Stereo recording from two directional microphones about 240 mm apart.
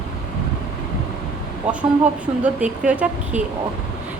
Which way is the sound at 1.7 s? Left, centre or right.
Centre.